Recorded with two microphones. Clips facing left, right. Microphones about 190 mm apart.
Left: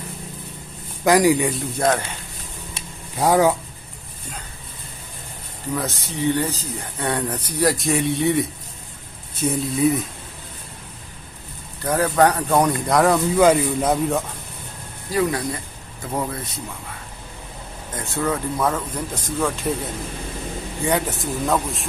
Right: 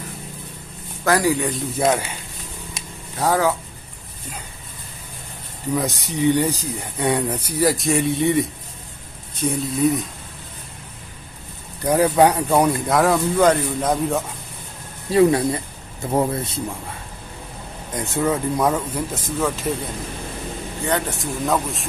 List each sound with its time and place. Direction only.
1.0 s a man's voice: 15° left (ahead or behind)
1.5 s speech: 10° right (ahead or behind)
3.2 s a man's voice: 15° left (ahead or behind)
5.7 s speech: 15° right (ahead or behind); by 10.0 s centre (ahead or behind)
11.8 s speech: 15° right (ahead or behind); by 14.2 s 5° left (ahead or behind)
15.1 s speech: 25° right (ahead or behind)
17.9 s speech: 15° right (ahead or behind); by 19.7 s centre (ahead or behind)
20.8 s speech: 5° left (ahead or behind)